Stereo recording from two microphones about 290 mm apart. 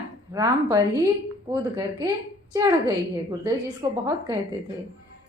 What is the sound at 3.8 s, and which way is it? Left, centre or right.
Speech, centre.